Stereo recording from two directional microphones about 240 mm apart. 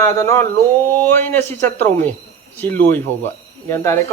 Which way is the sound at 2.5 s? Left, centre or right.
Centre.